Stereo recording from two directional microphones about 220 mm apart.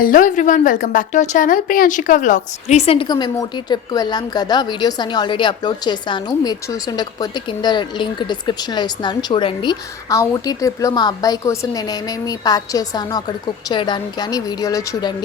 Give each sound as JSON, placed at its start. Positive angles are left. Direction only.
{"t": 0.0, "sound": "a woman's voice", "side_deg": 40}